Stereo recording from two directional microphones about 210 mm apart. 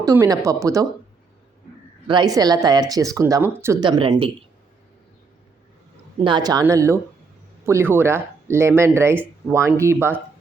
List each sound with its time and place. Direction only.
0.0 s speech: 15° right (ahead or behind)
2.0 s a woman's voice: 20° right (ahead or behind)
6.2 s speech: 20° right (ahead or behind)